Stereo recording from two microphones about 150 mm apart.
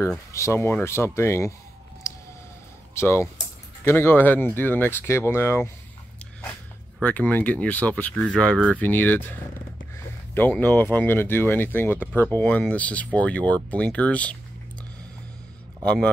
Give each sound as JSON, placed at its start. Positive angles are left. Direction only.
{"t": 0.3, "sound": "speech", "side_deg": 20}
{"t": 2.0, "sound": "a sound", "side_deg": 20}
{"t": 2.9, "sound": "speech", "side_deg": 20}
{"t": 7.0, "sound": "speech", "side_deg": 10}
{"t": 15.8, "sound": "speech", "side_deg": 10}